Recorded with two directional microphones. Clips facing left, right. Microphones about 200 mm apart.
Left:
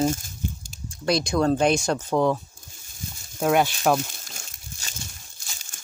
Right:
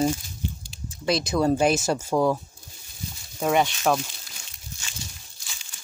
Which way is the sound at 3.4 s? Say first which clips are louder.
Left 1 dB; centre (ahead or behind).